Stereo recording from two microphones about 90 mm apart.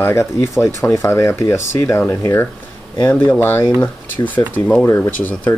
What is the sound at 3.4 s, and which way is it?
Speech, 25° left (ahead or behind).